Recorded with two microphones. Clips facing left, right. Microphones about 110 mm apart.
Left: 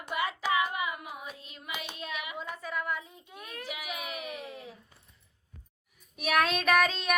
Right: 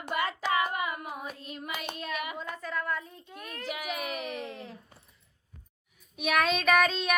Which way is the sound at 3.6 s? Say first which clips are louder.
Right 5 dB; 50° right (ahead or behind).